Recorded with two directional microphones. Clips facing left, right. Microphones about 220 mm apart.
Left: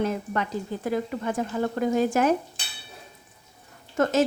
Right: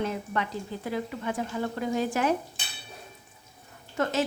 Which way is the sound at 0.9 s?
45° left (ahead or behind).